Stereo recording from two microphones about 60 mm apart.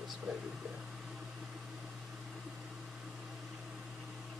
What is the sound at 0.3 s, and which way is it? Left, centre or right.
Speech, centre.